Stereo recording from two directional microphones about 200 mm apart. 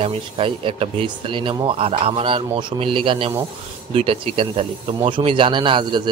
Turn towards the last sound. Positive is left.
turn(degrees=-25)  # may be behind; listen again after turning